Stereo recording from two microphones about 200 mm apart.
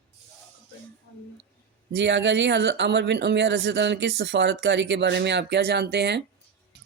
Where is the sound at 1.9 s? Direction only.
60° right (ahead or behind).